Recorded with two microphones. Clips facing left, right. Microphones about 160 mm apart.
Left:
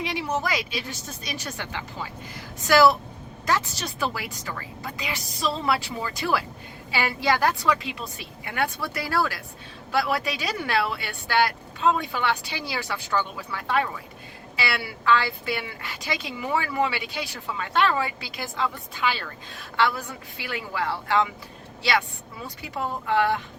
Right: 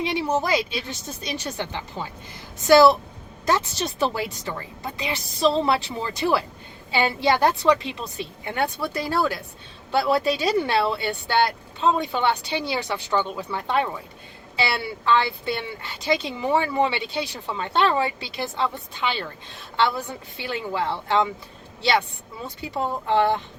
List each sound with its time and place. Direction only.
0.0 s speech: 25° right (ahead or behind)
22.4 s speech: 25° right (ahead or behind)